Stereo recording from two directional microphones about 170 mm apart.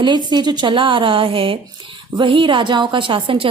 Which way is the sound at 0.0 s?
25° right (ahead or behind).